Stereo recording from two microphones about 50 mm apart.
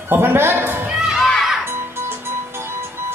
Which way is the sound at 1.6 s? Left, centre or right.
Right.